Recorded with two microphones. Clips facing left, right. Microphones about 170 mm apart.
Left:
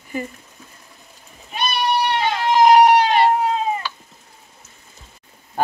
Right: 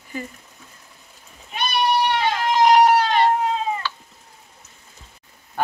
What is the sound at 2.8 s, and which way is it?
Goat, 15° left (ahead or behind).